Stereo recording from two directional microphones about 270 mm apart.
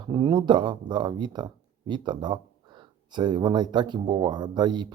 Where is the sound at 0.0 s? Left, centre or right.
Centre.